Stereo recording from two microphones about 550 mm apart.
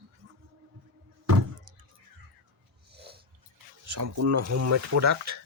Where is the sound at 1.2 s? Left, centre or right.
Right.